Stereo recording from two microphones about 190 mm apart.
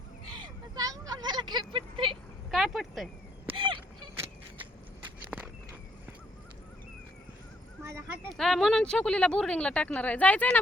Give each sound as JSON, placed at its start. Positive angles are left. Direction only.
{"t": 0.3, "sound": "vehicle", "side_deg": -20}
{"t": 2.5, "sound": "speech", "side_deg": 0}
{"t": 3.5, "sound": "a sound", "side_deg": -25}
{"t": 5.3, "sound": "walk", "side_deg": -5}
{"t": 7.9, "sound": "a sound", "side_deg": -15}
{"t": 8.4, "sound": "speech", "side_deg": 0}